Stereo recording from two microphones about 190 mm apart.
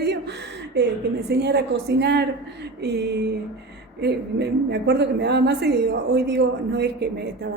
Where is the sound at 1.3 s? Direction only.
60° right (ahead or behind).